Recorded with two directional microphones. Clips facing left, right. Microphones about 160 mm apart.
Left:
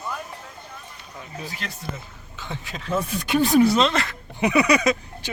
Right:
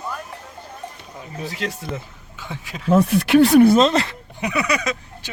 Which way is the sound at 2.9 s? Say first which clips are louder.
Right 9 dB; 75° right (ahead or behind).